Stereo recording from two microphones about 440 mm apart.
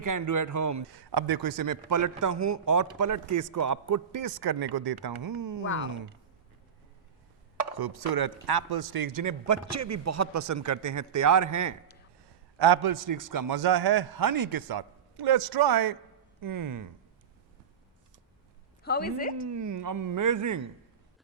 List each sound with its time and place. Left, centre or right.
0.0 s a man's voice: right
0.9 s a man's voice: right
5.6 s a woman's voice: left
7.8 s a man's voice: right
12.5 s a man's voice: right
18.8 s a woman's voice: left
19.5 s a man's voice: right